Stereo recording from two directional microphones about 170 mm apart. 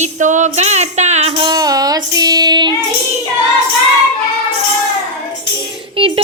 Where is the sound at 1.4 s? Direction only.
25° right (ahead or behind).